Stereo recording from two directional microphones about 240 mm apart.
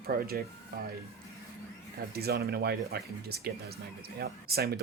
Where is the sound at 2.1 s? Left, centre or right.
Right.